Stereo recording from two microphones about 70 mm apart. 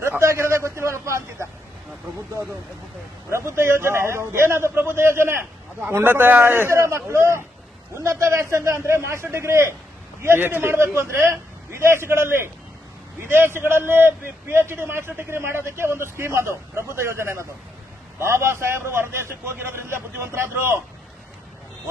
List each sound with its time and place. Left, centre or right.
0.2 s a sound: right
3.2 s a man's voice: right
10.2 s a man's voice: right